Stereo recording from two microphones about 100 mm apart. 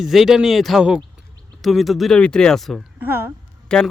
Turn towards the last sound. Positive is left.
turn(degrees=10)  # may be behind; listen again after turning